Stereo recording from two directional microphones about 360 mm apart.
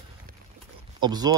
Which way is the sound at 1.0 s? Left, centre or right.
Centre.